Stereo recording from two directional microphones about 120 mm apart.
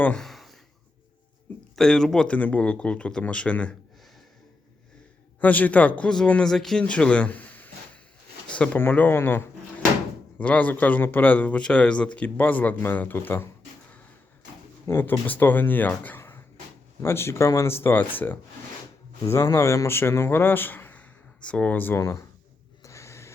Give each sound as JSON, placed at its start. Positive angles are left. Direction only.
{"t": 0.0, "sound": "a sound", "side_deg": 5}
{"t": 1.7, "sound": "a man's voice", "side_deg": 5}
{"t": 5.4, "sound": "a man's voice", "side_deg": 15}
{"t": 14.8, "sound": "a man's voice", "side_deg": 20}
{"t": 19.2, "sound": "a man's voice", "side_deg": 30}
{"t": 22.8, "sound": "snort", "side_deg": 25}